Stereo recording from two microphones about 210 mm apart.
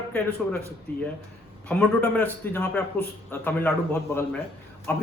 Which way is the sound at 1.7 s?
5° left (ahead or behind).